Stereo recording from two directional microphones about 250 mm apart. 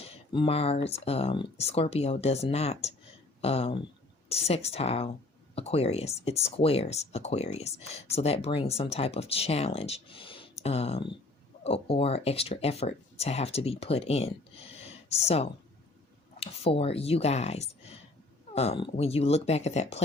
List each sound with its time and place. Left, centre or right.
0.0 s speech: left